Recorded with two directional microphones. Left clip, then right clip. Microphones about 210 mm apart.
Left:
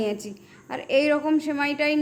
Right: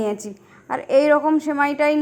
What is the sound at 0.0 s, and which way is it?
A woman's voice, 15° right (ahead or behind).